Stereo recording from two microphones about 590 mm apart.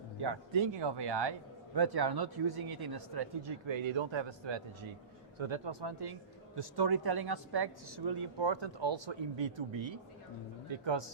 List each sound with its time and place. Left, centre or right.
0.2 s speech: right